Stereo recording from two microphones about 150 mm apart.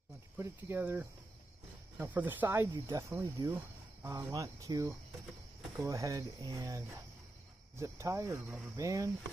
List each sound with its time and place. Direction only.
0.4 s speech: 15° right (ahead or behind)